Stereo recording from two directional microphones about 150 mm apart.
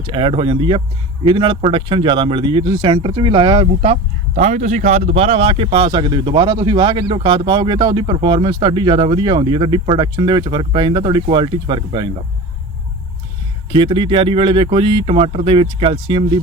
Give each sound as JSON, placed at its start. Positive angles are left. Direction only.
{"t": 0.1, "sound": "speech", "side_deg": -35}
{"t": 4.4, "sound": "speech", "side_deg": -55}
{"t": 13.7, "sound": "speech", "side_deg": -35}